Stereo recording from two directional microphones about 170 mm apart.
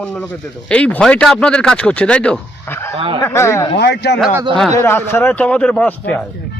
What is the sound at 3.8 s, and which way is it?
Speech, 80° left.